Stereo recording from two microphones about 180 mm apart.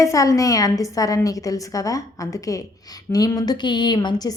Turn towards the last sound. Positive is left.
turn(degrees=25)  # may be behind; listen again after turning